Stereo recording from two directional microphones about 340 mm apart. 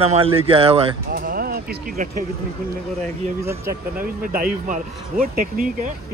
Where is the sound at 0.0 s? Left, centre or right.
Centre.